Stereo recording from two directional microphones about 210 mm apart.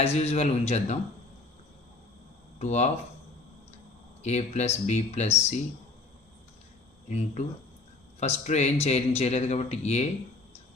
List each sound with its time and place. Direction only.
0.0 s speech: 30° left (ahead or behind)
2.6 s speech: 30° left (ahead or behind)
4.2 s speech: 35° left (ahead or behind)
7.1 s speech: 30° left (ahead or behind)